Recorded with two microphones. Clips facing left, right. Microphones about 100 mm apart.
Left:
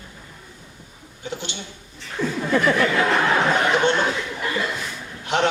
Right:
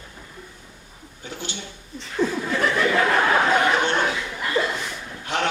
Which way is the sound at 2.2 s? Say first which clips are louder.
Right 3 dB; 25° right (ahead or behind).